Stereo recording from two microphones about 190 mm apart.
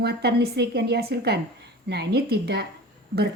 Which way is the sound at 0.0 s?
60° right (ahead or behind).